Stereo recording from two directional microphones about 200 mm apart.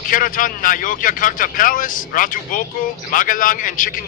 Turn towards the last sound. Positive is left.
turn(degrees=40)  # may be behind; listen again after turning